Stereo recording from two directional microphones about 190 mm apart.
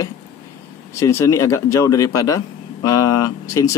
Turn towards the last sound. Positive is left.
turn(degrees=20)  # may be behind; listen again after turning